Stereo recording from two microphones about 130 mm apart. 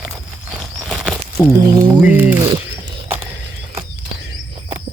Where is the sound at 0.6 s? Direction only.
Centre (ahead or behind).